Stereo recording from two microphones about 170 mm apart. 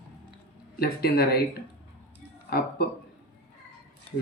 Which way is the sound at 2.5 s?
65° left (ahead or behind).